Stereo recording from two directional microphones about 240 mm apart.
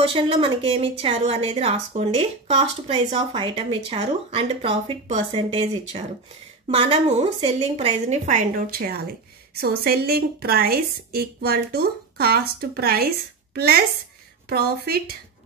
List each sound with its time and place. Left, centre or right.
0.0 s a woman's voice: right